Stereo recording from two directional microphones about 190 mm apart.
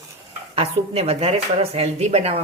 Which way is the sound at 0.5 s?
30° right (ahead or behind).